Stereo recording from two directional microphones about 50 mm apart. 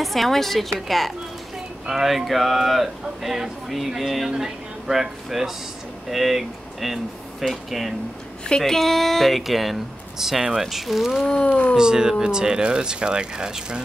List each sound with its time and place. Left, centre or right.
0.0 s speech: centre
8.5 s speech: centre
11.4 s speech: left
11.7 s speech: centre